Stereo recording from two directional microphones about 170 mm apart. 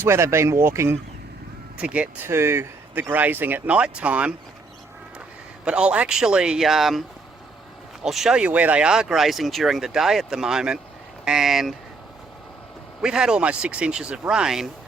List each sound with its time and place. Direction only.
0.0 s speech: 15° right (ahead or behind)
5.6 s speech: 5° right (ahead or behind)
8.0 s speech: centre (ahead or behind)
13.0 s speech: 5° right (ahead or behind)